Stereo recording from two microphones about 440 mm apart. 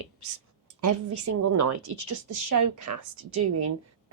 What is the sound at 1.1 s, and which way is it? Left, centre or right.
A woman's voice, right.